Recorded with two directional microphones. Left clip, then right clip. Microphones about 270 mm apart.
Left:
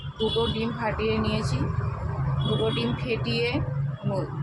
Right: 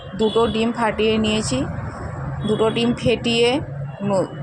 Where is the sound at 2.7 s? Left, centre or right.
Right.